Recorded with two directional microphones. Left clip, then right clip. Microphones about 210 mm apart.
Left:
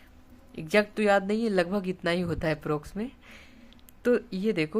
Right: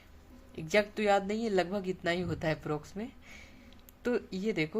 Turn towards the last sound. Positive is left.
turn(degrees=25)  # may be behind; listen again after turning